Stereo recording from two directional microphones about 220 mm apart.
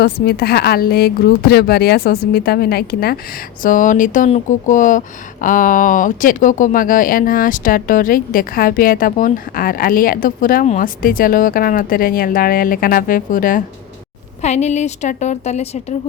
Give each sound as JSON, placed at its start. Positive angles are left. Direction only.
{"t": 0.0, "sound": "speech", "side_deg": 45}